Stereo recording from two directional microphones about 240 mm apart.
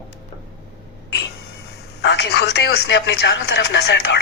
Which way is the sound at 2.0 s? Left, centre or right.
Left.